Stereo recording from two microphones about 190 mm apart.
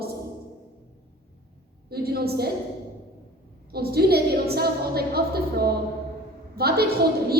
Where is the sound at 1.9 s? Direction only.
55° right (ahead or behind).